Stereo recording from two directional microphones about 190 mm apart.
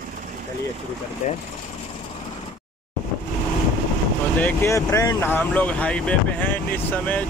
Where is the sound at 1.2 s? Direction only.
40° left (ahead or behind).